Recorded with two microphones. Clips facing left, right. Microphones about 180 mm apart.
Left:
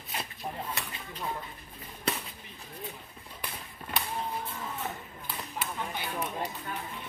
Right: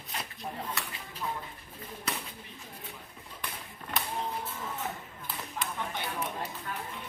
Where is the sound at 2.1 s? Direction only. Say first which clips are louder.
Left 4 dB; 25° left (ahead or behind).